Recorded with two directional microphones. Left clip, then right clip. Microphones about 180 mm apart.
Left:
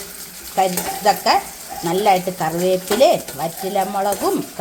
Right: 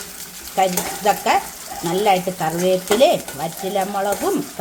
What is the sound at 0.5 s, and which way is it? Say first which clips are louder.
Stir: even; centre (ahead or behind).